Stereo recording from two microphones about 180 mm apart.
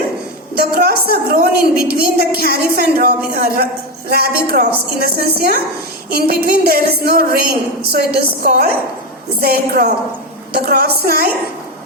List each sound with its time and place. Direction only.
0.5 s a woman's voice: 60° right (ahead or behind)